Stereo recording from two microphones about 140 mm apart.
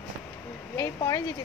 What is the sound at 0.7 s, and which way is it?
Speech, 25° left (ahead or behind).